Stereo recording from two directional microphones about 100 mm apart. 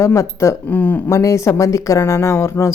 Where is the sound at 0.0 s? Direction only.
30° left (ahead or behind).